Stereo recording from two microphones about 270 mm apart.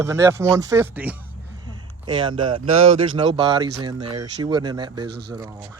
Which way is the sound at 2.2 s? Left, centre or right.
Centre.